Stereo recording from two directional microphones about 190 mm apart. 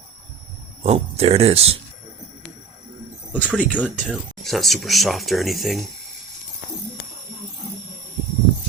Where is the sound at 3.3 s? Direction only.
10° left (ahead or behind).